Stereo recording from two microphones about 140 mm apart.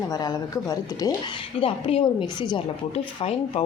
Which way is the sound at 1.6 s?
40° left (ahead or behind).